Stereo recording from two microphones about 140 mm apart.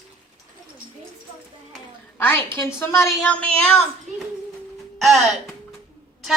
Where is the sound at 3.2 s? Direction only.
10° left (ahead or behind).